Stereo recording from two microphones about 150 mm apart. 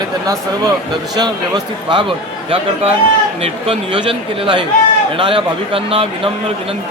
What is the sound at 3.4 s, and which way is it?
Speech, 40° right (ahead or behind).